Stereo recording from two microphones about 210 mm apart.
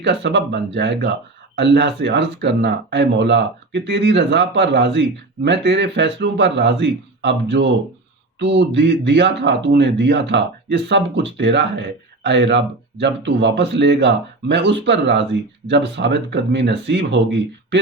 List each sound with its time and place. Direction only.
0.0 s a man's voice: 55° right (ahead or behind)